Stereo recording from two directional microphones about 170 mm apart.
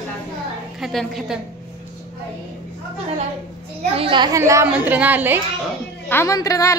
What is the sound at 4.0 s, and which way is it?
A woman's voice, 30° right (ahead or behind).